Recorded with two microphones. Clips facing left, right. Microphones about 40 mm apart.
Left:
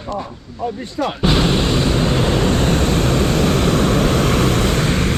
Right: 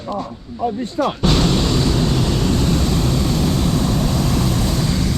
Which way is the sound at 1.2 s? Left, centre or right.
Left.